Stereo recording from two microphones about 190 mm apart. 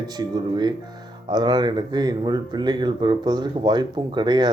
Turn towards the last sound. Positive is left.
turn(degrees=-20)  # may be behind; listen again after turning